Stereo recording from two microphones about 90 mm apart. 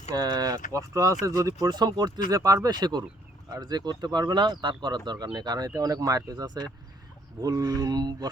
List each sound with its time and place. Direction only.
0.1 s speech: 45° right (ahead or behind)